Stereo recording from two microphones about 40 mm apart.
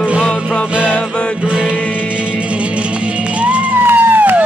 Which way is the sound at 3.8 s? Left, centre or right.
Right.